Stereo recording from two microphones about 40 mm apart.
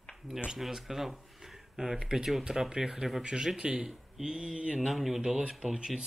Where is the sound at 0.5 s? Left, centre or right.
Centre; by 4.7 s right.